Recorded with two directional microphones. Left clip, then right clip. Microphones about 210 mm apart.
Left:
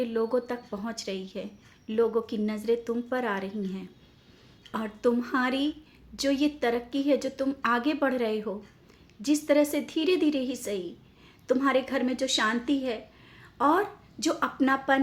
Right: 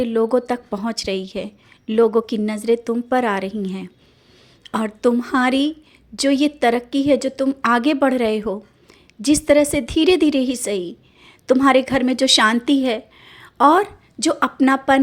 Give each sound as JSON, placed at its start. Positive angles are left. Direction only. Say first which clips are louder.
{"t": 0.0, "sound": "a woman's voice", "louder": "right 9 dB", "side_deg": -35}